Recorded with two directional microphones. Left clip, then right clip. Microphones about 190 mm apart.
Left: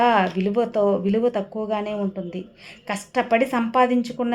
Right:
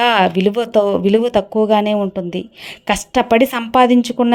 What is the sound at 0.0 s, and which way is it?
Speech, 40° right (ahead or behind).